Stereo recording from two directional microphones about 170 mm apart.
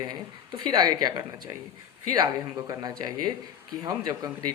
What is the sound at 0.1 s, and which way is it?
Speech, 25° right (ahead or behind).